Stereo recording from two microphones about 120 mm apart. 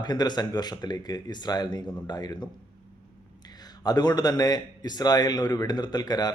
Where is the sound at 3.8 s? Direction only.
35° left (ahead or behind).